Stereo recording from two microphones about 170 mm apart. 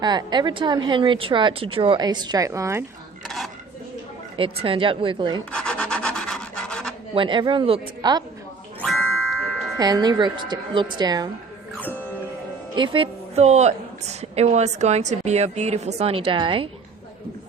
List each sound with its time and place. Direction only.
0.0 s speech: 25° right (ahead or behind)
3.2 s speech: centre (ahead or behind)
4.4 s a woman's voice: 30° right (ahead or behind)
5.5 s rub: 5° left (ahead or behind)
7.1 s speech: 30° right (ahead or behind)
8.8 s music: 5° left (ahead or behind)
9.7 s speech: 20° right (ahead or behind)
11.8 s music: 10° left (ahead or behind)
12.7 s a woman's voice: 30° right (ahead or behind)